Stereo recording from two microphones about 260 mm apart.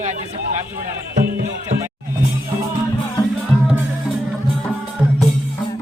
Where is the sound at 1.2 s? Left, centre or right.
Right.